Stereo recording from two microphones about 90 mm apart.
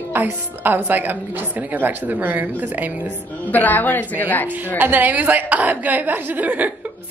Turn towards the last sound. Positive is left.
turn(degrees=-20)  # may be behind; listen again after turning